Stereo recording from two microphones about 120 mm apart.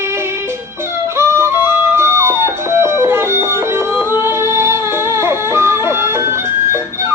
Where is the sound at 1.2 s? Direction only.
20° right (ahead or behind).